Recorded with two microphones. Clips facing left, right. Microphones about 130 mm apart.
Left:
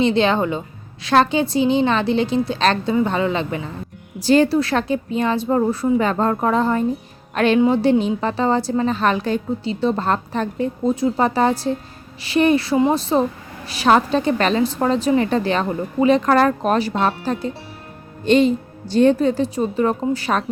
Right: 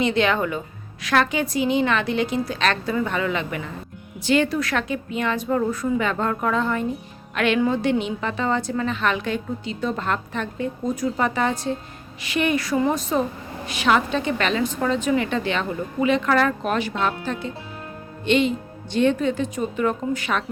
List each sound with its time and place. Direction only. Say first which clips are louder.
0.0 s a woman's voice: left 4 dB; 30° left (ahead or behind)